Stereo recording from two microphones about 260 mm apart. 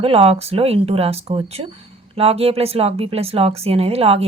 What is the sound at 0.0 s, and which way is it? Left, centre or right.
Speech, right.